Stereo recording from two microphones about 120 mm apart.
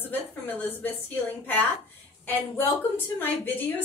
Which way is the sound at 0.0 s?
15° left (ahead or behind).